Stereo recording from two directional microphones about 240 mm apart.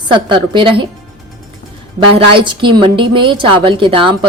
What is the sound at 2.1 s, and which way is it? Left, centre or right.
Speech, right.